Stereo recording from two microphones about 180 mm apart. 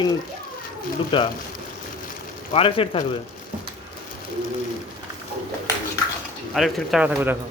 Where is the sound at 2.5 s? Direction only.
30° left (ahead or behind).